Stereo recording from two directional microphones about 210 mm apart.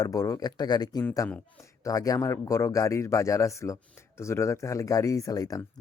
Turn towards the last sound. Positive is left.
turn(degrees=15)  # may be behind; listen again after turning